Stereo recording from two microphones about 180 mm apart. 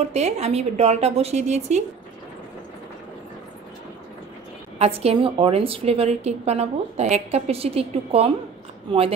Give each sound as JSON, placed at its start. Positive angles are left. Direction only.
{"t": 0.1, "sound": "a woman's voice", "side_deg": -35}
{"t": 4.7, "sound": "a woman's voice", "side_deg": -35}